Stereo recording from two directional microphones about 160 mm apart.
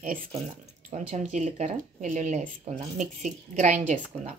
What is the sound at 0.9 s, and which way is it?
Speech, 45° right (ahead or behind).